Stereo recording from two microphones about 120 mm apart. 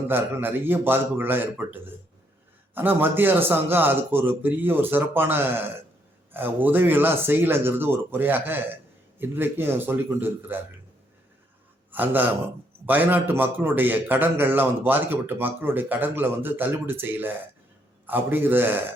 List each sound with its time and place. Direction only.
0.1 s a man's voice: 15° right (ahead or behind)
11.9 s a man's voice: 15° right (ahead or behind)